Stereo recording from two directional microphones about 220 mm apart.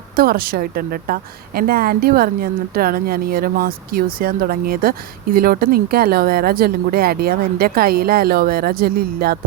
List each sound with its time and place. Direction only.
0.2 s a woman's voice: 40° right (ahead or behind)